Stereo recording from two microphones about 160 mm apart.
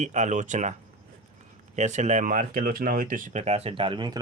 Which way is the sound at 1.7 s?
45° right (ahead or behind).